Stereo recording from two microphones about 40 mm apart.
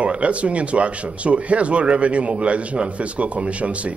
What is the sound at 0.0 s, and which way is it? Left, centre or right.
Speech, right.